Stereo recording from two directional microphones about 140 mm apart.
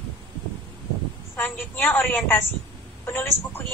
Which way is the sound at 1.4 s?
10° left (ahead or behind).